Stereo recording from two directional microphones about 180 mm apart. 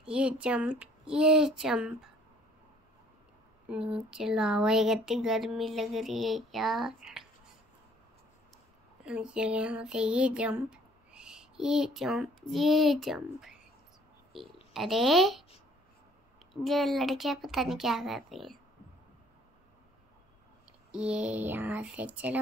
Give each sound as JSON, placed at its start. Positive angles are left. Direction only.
{"t": 0.0, "sound": "speech", "side_deg": -5}
{"t": 3.6, "sound": "speech", "side_deg": -5}
{"t": 9.0, "sound": "a sound", "side_deg": -5}
{"t": 14.3, "sound": "speech", "side_deg": 0}
{"t": 16.6, "sound": "speech", "side_deg": 0}
{"t": 20.9, "sound": "speech", "side_deg": -5}